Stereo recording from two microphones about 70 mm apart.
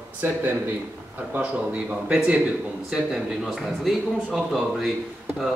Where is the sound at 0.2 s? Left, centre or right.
Right.